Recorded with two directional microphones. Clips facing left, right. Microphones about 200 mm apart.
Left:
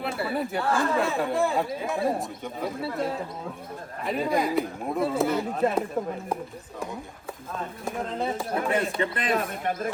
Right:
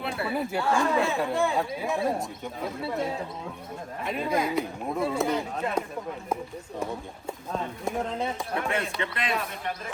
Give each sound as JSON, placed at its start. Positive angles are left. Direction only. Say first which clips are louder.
{"t": 0.2, "sound": "speech", "louder": "right 1 dB", "side_deg": 0}
{"t": 8.2, "sound": "speech", "louder": "left 2 dB", "side_deg": 5}
{"t": 9.0, "sound": "speech", "louder": "left 4 dB", "side_deg": 45}